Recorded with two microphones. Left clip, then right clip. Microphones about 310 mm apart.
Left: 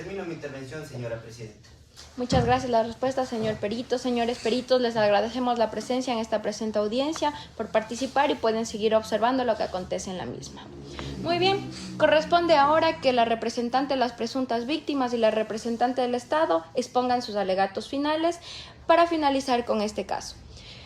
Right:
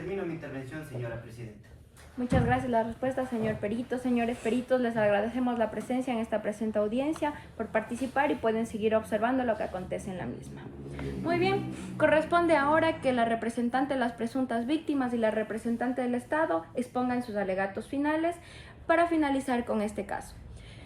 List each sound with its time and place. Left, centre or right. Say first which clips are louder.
2.2 s a woman's voice: left 5 dB; left
11.3 s a woman's voice: left 4 dB; centre